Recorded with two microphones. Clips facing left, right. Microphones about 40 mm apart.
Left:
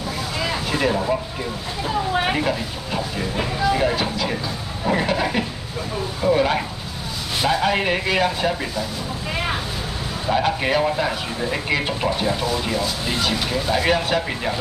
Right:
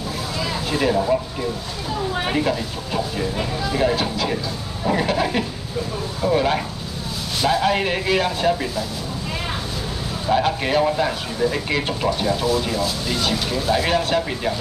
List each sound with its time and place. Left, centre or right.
0.7 s speech: centre
2.1 s speech: centre
10.2 s speech: centre